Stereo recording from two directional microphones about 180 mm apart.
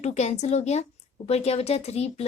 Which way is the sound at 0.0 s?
40° left (ahead or behind).